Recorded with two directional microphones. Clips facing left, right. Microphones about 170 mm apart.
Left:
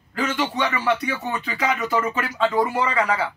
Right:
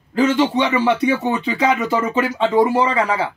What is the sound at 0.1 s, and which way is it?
Speech, 25° right (ahead or behind).